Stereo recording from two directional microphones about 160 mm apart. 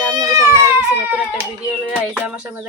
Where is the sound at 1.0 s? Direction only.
10° right (ahead or behind).